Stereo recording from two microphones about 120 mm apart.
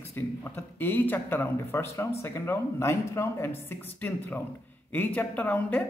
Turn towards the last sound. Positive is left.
turn(degrees=15)  # may be behind; listen again after turning